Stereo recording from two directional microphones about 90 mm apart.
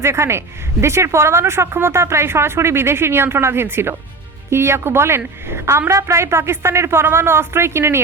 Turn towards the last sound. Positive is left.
turn(degrees=-30)  # may be behind; listen again after turning